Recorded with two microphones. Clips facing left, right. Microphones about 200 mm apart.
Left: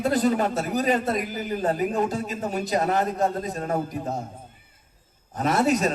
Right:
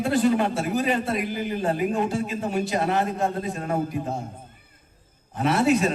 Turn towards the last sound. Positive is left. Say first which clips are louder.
# right 1 dB
turn(degrees=40)  # may be behind; listen again after turning